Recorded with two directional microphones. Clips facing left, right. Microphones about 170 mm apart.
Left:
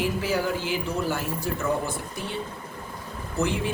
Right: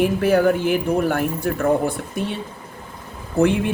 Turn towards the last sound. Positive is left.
turn(degrees=-60)  # may be behind; listen again after turning